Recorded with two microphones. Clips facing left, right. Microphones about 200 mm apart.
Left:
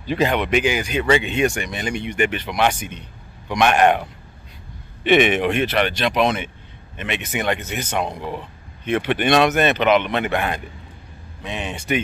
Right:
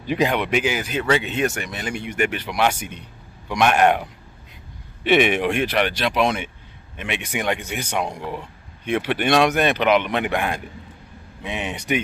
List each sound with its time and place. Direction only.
0.0 s speech: 15° right (ahead or behind)
0.3 s speech: 5° right (ahead or behind)